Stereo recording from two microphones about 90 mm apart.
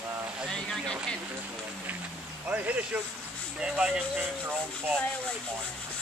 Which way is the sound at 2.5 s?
15° right (ahead or behind).